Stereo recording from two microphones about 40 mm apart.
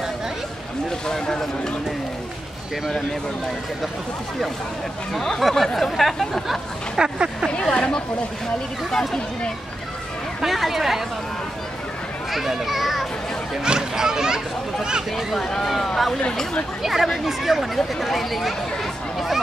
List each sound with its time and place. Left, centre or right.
1.0 s speech: centre
5.1 s speech: centre
7.0 s a child's voice: centre
7.7 s speech: left
8.9 s speech: centre
10.4 s speech: centre
12.3 s a child's voice: centre
13.7 s a child's voice: centre
15.3 s speech: centre
16.8 s speech: centre
19.1 s chatter: centre